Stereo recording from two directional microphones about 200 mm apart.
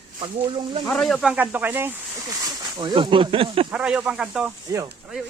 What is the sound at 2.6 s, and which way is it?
Speech, 20° right (ahead or behind).